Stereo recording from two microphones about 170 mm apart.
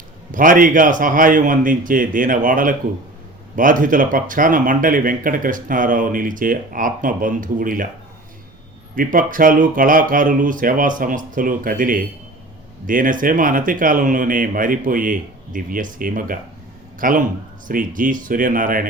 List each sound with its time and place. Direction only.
0.3 s speech: 55° right (ahead or behind)
9.1 s speech: 50° right (ahead or behind)